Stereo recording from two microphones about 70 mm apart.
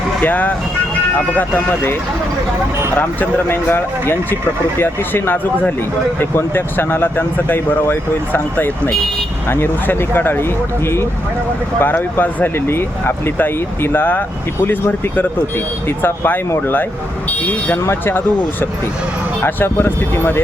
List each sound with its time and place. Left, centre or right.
0.2 s speech: left
3.0 s speech: left
11.8 s speech: left
17.4 s speech: left
19.5 s speech: left